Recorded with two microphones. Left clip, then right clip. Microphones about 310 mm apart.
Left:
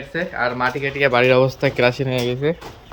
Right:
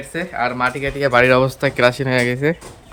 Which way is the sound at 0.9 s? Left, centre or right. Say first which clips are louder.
Even; right.